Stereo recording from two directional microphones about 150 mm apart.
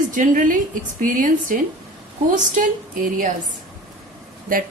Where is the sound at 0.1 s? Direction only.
65° right (ahead or behind).